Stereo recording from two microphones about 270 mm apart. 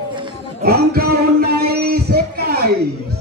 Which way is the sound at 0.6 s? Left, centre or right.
Right.